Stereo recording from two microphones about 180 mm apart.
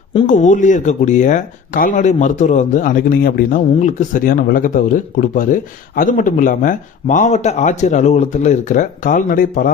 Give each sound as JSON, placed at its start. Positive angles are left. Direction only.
{"t": 0.3, "sound": "speech", "side_deg": 45}
{"t": 3.8, "sound": "speech", "side_deg": 45}